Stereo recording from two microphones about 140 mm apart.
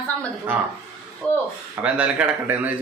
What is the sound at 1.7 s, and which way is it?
Speech, 10° right (ahead or behind).